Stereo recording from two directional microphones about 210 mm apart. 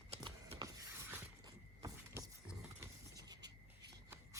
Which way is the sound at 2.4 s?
15° right (ahead or behind).